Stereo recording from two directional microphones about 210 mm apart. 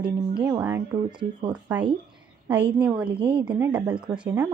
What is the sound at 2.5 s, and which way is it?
A woman's voice, 10° right (ahead or behind).